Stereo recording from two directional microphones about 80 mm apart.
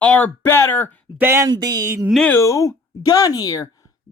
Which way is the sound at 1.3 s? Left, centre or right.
Right.